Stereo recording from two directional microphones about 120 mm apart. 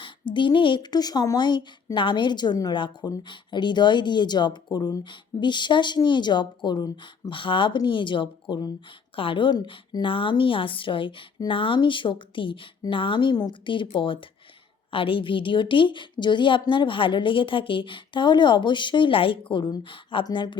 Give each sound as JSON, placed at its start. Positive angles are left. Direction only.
{"t": 0.0, "sound": "a woman's voice", "side_deg": 45}